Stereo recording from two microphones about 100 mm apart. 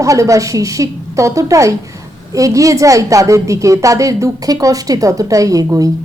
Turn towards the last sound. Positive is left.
turn(degrees=-35)  # may be behind; listen again after turning